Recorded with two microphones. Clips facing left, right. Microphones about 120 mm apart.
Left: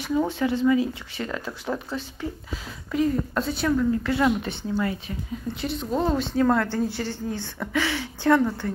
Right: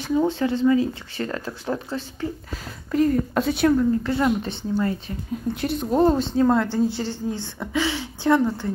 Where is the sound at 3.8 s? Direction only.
30° right (ahead or behind).